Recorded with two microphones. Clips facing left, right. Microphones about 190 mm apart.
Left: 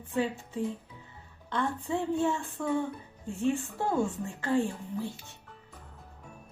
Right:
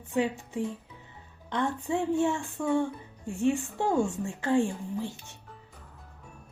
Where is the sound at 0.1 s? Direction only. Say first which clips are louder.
Right 2 dB; 15° right (ahead or behind).